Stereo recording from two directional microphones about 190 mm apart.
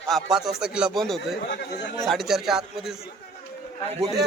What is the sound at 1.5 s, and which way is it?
Speech, 65° left (ahead or behind).